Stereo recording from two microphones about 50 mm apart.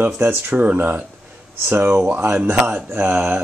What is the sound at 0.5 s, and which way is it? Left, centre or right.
Speech, right.